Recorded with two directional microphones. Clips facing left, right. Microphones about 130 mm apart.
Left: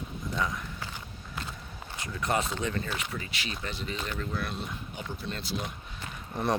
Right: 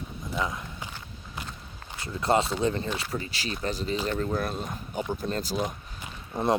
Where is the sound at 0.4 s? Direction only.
20° right (ahead or behind).